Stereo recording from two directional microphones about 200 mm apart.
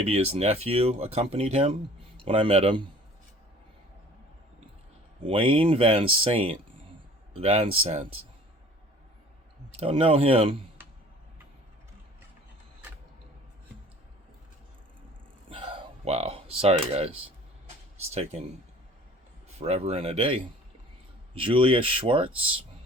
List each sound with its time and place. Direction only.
0.0 s speech: 30° right (ahead or behind)
5.2 s speech: 25° right (ahead or behind)
9.7 s speech: 30° right (ahead or behind)
15.4 s a sound: 25° right (ahead or behind)
18.1 s speech: 30° right (ahead or behind)
19.5 s speech: 30° right (ahead or behind)